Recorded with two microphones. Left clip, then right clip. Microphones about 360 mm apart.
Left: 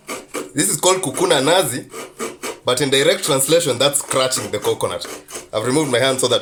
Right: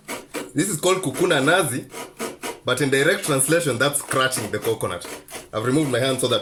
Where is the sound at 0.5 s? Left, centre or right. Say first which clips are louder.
Left 4 dB; centre.